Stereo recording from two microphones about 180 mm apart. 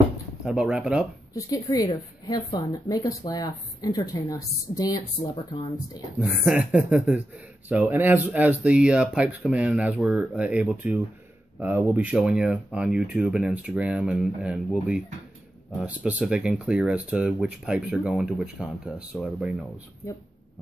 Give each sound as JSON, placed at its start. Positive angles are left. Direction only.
{"t": 0.5, "sound": "speech", "side_deg": -5}
{"t": 1.3, "sound": "a woman's voice", "side_deg": 20}
{"t": 6.1, "sound": "speech", "side_deg": -5}